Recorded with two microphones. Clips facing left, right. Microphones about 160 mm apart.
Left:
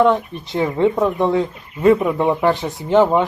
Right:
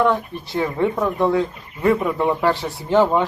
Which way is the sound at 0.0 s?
20° left (ahead or behind).